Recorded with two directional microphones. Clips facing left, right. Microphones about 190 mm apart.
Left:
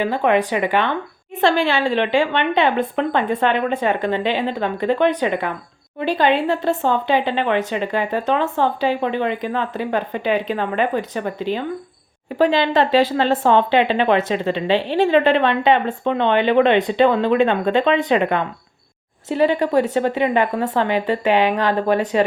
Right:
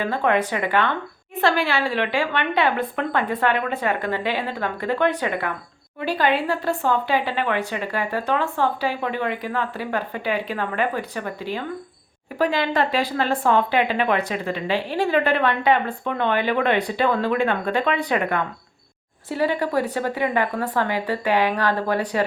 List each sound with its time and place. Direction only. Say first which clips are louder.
0.0 s speech: left 4 dB; 15° left (ahead or behind)